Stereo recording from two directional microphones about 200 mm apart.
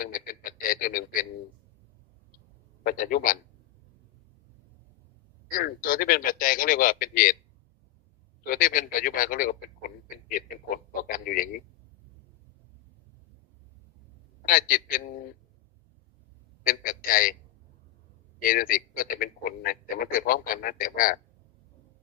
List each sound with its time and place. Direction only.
0.0 s speech: 45° left (ahead or behind)
2.8 s speech: 45° left (ahead or behind)
5.5 s speech: 45° left (ahead or behind)
8.4 s speech: 45° left (ahead or behind)
14.4 s speech: 45° left (ahead or behind)
16.6 s speech: 45° left (ahead or behind)
18.4 s speech: 45° left (ahead or behind)